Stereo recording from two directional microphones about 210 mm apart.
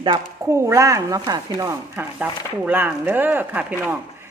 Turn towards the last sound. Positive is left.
turn(degrees=-10)  # may be behind; listen again after turning